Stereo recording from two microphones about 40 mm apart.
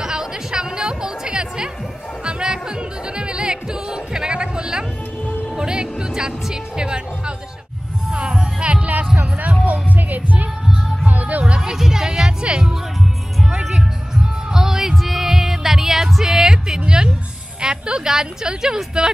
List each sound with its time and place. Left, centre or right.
0.0 s music: centre; by 10.5 s right
11.1 s a sound: right
11.4 s music: right
11.7 s music: centre
14.5 s music: centre
18.0 s a sound: centre